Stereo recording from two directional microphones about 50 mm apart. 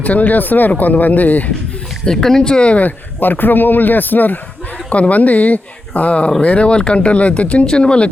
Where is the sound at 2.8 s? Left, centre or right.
Left.